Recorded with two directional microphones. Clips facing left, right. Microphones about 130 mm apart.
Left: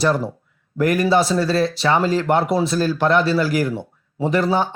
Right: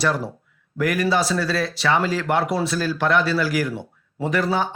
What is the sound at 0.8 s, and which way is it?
Speech, 25° left (ahead or behind).